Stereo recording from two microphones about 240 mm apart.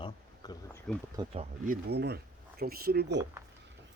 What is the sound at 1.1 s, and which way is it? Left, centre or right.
Speech, right.